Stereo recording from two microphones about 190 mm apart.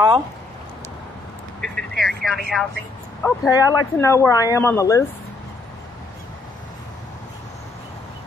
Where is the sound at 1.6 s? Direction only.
Centre (ahead or behind).